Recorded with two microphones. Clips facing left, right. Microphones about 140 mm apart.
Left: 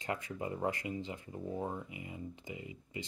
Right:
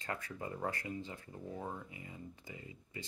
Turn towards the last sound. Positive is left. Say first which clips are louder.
# left 5 dB
turn(degrees=15)  # may be behind; listen again after turning